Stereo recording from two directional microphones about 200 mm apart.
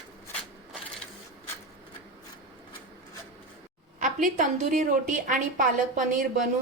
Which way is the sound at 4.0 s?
40° right (ahead or behind).